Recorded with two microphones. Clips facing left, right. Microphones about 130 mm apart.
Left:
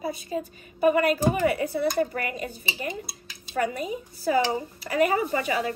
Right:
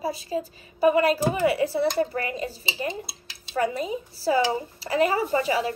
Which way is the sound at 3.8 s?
30° right (ahead or behind).